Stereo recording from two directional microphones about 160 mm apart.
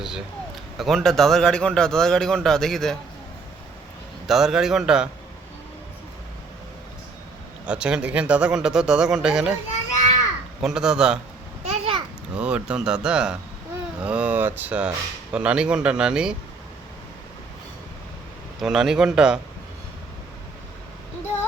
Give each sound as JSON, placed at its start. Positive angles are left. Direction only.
{"t": 0.8, "sound": "a man's voice", "side_deg": 0}
{"t": 4.3, "sound": "a man's voice", "side_deg": -5}
{"t": 7.6, "sound": "a man's voice", "side_deg": -5}
{"t": 10.6, "sound": "a man's voice", "side_deg": -5}
{"t": 11.6, "sound": "babbling", "side_deg": -40}
{"t": 12.3, "sound": "a man's voice", "side_deg": -10}
{"t": 18.6, "sound": "a man's voice", "side_deg": -5}